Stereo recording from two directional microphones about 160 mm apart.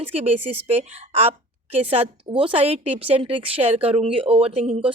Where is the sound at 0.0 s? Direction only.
40° right (ahead or behind).